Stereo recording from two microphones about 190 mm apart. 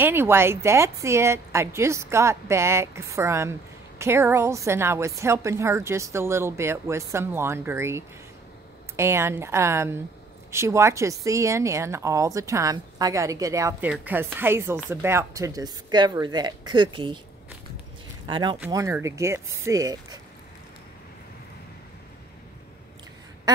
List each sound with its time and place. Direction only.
0.0 s a woman's voice: 10° right (ahead or behind)
18.2 s a woman's voice: 25° right (ahead or behind)